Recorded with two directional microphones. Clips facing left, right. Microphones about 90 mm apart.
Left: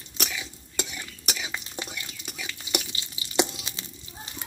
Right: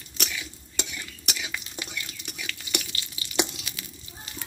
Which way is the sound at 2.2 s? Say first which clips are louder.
Even; 15° left (ahead or behind).